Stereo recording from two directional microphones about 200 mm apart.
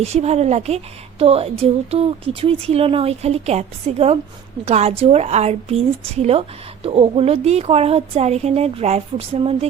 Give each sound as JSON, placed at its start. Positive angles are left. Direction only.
{"t": 0.0, "sound": "speech", "side_deg": -35}